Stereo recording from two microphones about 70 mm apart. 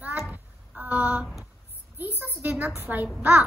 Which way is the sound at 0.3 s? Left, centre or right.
Right.